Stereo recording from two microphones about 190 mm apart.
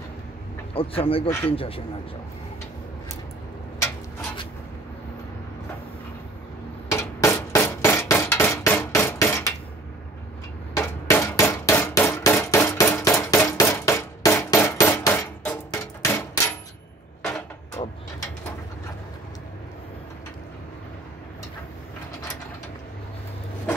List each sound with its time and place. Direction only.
0.7 s speech: 30° left (ahead or behind)
6.9 s hammer: 15° left (ahead or behind)
10.8 s hammer: 15° left (ahead or behind)
17.8 s a sound: 25° left (ahead or behind)